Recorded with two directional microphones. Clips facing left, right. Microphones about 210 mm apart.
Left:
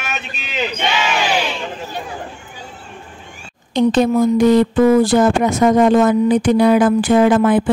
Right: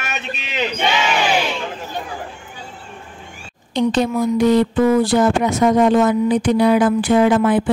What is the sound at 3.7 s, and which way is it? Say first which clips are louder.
Speech: left 4 dB; 50° left (ahead or behind).